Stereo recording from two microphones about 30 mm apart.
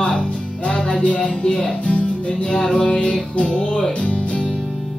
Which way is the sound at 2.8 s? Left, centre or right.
Left.